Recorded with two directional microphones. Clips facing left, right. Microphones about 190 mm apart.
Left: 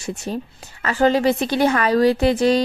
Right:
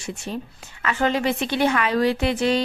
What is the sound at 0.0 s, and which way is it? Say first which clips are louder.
A woman's voice: left 4 dB; 40° left (ahead or behind).